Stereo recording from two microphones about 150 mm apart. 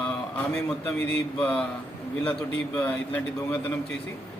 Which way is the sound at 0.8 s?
10° left (ahead or behind).